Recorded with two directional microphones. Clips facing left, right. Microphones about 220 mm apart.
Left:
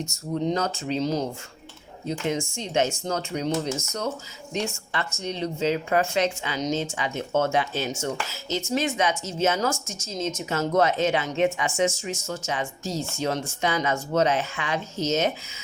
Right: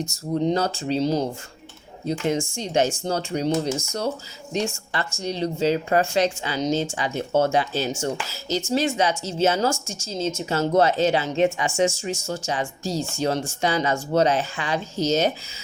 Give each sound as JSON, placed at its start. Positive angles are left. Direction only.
{"t": 0.0, "sound": "a woman's voice", "side_deg": -35}